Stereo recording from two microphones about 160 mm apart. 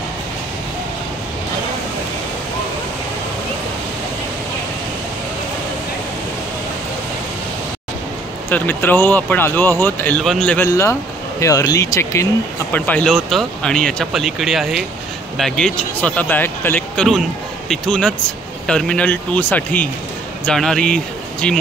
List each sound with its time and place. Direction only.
8.5 s speech: 10° left (ahead or behind)
10.7 s speech: 20° left (ahead or behind)